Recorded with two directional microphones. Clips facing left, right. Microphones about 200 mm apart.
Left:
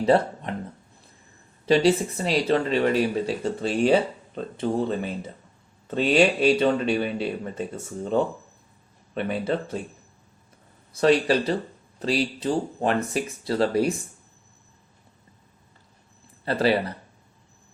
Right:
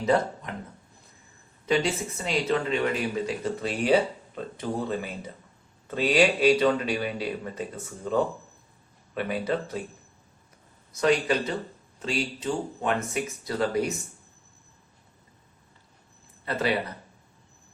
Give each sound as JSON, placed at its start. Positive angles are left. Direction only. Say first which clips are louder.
{"t": 0.0, "sound": "speech", "louder": "left 4 dB", "side_deg": 30}
{"t": 1.6, "sound": "speech", "louder": "left 6 dB", "side_deg": 35}
{"t": 9.1, "sound": "speech", "louder": "left 2 dB", "side_deg": 25}
{"t": 11.0, "sound": "speech", "louder": "left 4 dB", "side_deg": 35}
{"t": 16.5, "sound": "speech", "louder": "left 5 dB", "side_deg": 30}